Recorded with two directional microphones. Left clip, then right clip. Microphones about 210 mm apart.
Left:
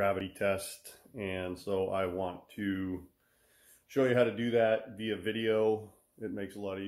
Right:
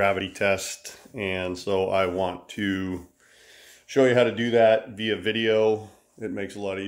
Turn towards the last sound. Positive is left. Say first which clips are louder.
# right 8 dB
turn(degrees=-20)  # may be behind; listen again after turning